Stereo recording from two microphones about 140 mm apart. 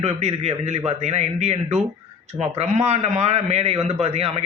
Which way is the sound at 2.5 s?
50° right (ahead or behind).